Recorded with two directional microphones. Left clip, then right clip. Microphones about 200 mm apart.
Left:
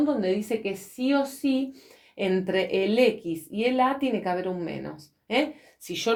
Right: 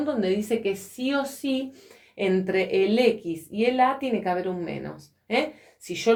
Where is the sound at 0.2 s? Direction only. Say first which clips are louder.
Right 2 dB; 20° left (ahead or behind).